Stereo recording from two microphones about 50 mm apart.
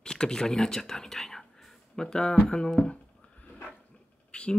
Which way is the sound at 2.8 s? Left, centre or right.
Left.